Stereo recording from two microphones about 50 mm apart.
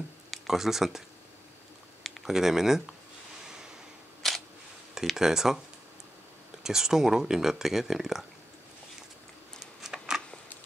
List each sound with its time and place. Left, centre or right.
0.3 s speech: centre
2.0 s speech: centre
4.2 s single-lens reflex camera: centre
5.1 s speech: centre
6.6 s speech: centre
9.6 s a sound: centre